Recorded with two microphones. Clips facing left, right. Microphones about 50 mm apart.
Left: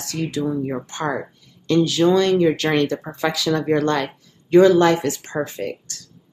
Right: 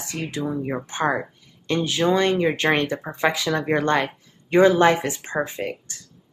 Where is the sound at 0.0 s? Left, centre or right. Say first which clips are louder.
Left 4 dB; right.